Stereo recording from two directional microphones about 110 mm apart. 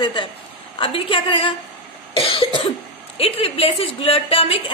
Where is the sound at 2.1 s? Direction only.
60° left (ahead or behind).